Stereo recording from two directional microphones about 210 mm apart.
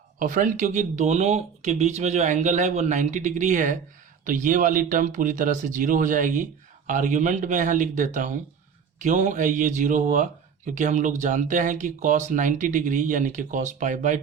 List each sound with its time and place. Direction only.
0.2 s speech: 40° right (ahead or behind)